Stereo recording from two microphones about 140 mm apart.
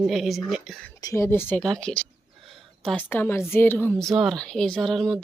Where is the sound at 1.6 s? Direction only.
5° left (ahead or behind).